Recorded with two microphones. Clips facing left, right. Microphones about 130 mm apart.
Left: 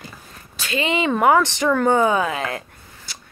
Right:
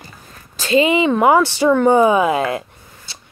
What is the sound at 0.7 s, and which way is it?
Speech, 25° right (ahead or behind).